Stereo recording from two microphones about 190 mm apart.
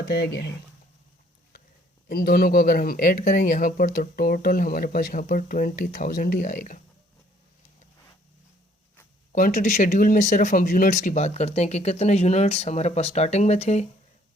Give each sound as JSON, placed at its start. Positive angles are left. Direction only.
{"t": 2.0, "sound": "speech", "side_deg": 50}
{"t": 9.3, "sound": "speech", "side_deg": 40}